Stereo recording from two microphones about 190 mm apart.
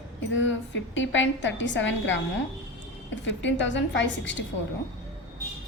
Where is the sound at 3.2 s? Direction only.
75° left (ahead or behind).